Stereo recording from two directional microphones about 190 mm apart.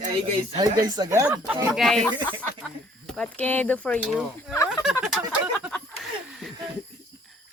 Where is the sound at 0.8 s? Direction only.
20° right (ahead or behind).